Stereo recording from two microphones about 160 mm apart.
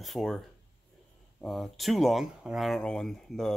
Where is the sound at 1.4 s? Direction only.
Centre (ahead or behind).